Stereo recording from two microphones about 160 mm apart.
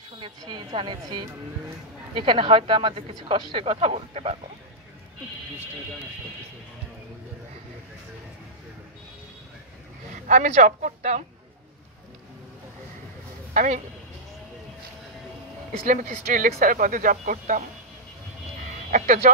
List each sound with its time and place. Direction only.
0.2 s a woman's voice: 30° right (ahead or behind)
10.2 s speech: 50° right (ahead or behind)
13.5 s speech: 50° right (ahead or behind)
15.9 s speech: 55° right (ahead or behind)
18.9 s speech: 55° right (ahead or behind)